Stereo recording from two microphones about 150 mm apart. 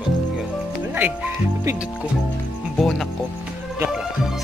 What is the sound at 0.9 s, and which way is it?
Speech, 10° right (ahead or behind).